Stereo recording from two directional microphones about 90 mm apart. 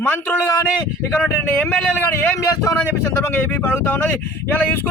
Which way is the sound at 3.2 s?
20° left (ahead or behind).